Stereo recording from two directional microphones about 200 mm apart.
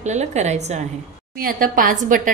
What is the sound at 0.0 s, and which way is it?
Speech, 35° right (ahead or behind).